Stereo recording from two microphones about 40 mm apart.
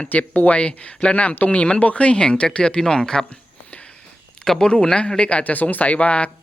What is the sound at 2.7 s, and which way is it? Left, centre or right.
Speech, centre.